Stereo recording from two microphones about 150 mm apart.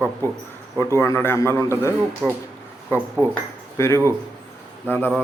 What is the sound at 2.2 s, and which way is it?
Speech, centre (ahead or behind).